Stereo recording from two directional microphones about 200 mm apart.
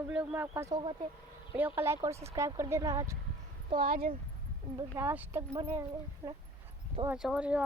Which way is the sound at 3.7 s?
45° right (ahead or behind).